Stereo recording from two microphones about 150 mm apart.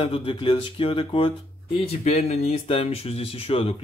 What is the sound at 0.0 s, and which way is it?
Speech, 40° left (ahead or behind).